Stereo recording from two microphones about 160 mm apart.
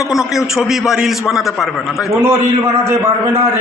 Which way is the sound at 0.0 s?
5° right (ahead or behind).